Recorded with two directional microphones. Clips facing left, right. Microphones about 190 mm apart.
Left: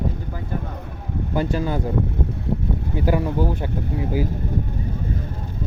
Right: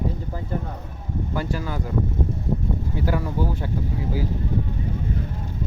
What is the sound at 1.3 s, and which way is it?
Speech, 25° left (ahead or behind).